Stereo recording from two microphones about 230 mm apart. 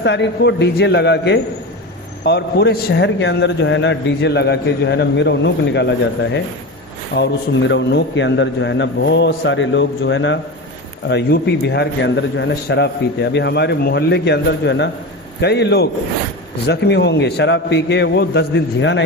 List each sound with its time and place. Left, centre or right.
0.0 s a man's voice: left
7.1 s a man's voice: left